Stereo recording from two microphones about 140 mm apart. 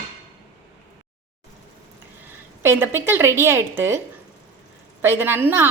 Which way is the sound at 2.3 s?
15° right (ahead or behind).